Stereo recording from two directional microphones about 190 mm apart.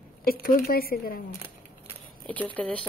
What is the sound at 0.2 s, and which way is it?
Speech, 50° left (ahead or behind).